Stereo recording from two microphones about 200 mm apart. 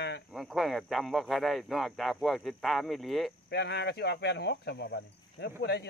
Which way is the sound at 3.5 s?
55° left (ahead or behind).